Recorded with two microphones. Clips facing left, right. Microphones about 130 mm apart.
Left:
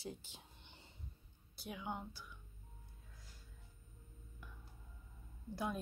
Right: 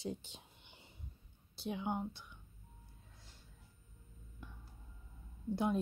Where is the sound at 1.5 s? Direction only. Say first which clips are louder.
Right 6 dB; 25° right (ahead or behind).